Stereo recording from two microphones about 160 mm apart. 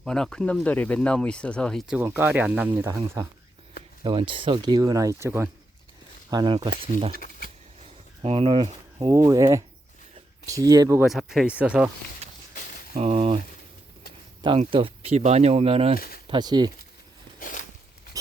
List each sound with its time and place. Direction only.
0.0 s speech: 5° left (ahead or behind)
2.0 s speech: 15° right (ahead or behind)
2.6 s speech: 25° right (ahead or behind)
4.0 s speech: 30° right (ahead or behind); by 5.5 s 15° right (ahead or behind)
6.3 s speech: 25° right (ahead or behind)
7.2 s a sound: 60° left (ahead or behind)
8.2 s speech: 35° right (ahead or behind)
9.1 s speech: 20° right (ahead or behind)
11.0 s speech: centre (ahead or behind)
12.2 s walk: 40° right (ahead or behind)
12.9 s speech: 40° right (ahead or behind)
14.4 s speech: 35° right (ahead or behind)
16.3 s speech: 25° right (ahead or behind)
17.4 s a sound: 60° left (ahead or behind)